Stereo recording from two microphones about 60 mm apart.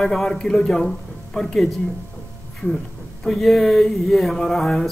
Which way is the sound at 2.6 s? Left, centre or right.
Left.